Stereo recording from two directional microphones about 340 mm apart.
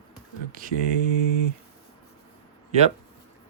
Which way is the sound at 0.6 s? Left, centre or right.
Right.